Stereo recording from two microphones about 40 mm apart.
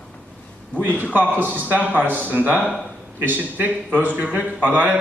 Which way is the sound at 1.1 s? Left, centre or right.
Right.